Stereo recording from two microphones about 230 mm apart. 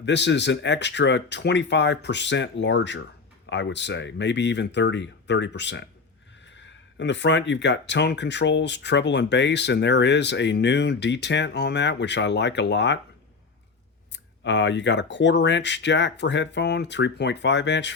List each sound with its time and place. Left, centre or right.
0.0 s speech: left
6.9 s speech: left
14.1 s speech: left